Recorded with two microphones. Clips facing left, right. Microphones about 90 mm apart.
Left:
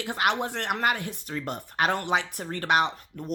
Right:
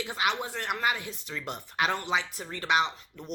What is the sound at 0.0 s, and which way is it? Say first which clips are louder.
Speech: left 4 dB; 55° left (ahead or behind).